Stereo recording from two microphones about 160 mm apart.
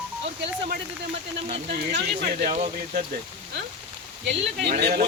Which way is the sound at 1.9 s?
65° right (ahead or behind).